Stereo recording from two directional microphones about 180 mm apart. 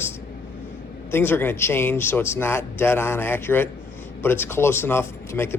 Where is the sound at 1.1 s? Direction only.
10° left (ahead or behind).